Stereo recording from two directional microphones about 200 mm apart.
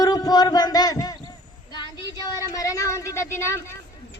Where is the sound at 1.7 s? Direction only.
20° left (ahead or behind).